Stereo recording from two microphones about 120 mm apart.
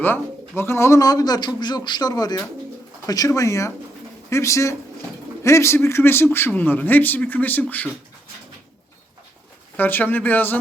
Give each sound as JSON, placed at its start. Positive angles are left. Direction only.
{"t": 0.0, "sound": "speech", "side_deg": 20}
{"t": 9.7, "sound": "speech", "side_deg": 15}